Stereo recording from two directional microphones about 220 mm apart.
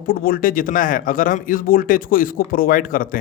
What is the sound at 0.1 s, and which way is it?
A man's voice, 40° left (ahead or behind).